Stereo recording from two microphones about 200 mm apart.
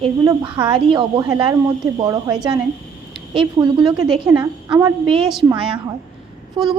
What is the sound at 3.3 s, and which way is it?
A woman's voice, 20° right (ahead or behind).